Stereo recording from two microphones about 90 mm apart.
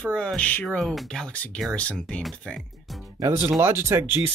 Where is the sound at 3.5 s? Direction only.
30° right (ahead or behind).